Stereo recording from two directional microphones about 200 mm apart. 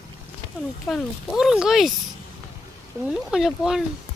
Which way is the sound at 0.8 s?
Centre (ahead or behind).